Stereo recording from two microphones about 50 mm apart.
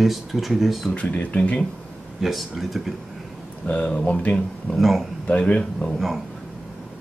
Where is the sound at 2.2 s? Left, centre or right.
Centre.